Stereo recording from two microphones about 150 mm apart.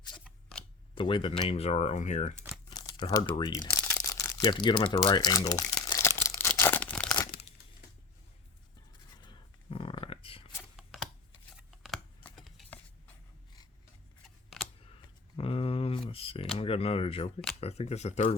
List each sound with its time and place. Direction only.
0.9 s speech: 35° left (ahead or behind); by 2.3 s 55° left (ahead or behind)
2.6 s crumpling: 30° left (ahead or behind)
3.5 s crumpling: 20° left (ahead or behind)
7.3 s crumpling: 90° left
9.2 s a sound: 35° left (ahead or behind)
10.8 s a sound: centre (ahead or behind)
12.2 s chopping: 5° left (ahead or behind)
15.4 s a sound: 40° left (ahead or behind)
16.6 s camera: 40° left (ahead or behind)
17.6 s speech: 45° left (ahead or behind)